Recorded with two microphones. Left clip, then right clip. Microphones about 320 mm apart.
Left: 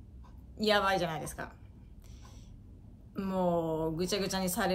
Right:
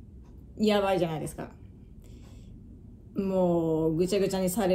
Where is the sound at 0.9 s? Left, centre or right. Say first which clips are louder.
Right 4 dB; left.